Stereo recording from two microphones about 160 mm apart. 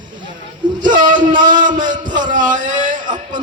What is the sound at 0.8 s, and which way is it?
A man's voice, 55° right (ahead or behind).